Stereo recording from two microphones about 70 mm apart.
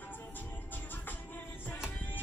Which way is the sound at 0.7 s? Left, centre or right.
Left.